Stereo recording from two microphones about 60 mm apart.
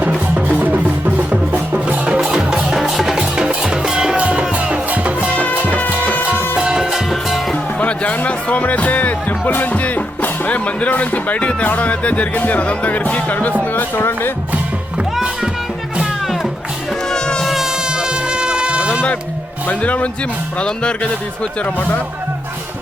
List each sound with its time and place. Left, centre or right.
0.0 s music: right
5.6 s music: left
6.3 s music: left
6.6 s music: centre
7.8 s music: left
9.4 s speech: left
16.2 s music: centre
17.1 s music: centre
17.4 s a sound: centre
19.6 s speech: left